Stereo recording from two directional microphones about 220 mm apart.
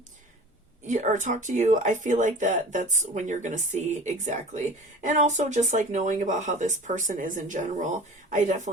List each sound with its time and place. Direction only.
0.9 s speech: 35° right (ahead or behind)